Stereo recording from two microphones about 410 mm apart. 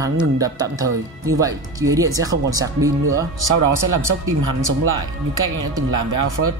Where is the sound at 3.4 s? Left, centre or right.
Right.